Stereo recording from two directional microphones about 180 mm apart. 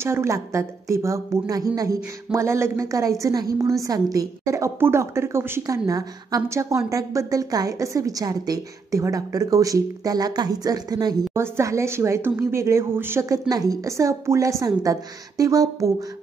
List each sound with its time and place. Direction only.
0.0 s a woman's voice: 15° right (ahead or behind)